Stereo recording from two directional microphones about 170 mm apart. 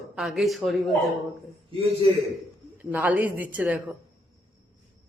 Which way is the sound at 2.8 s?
10° right (ahead or behind).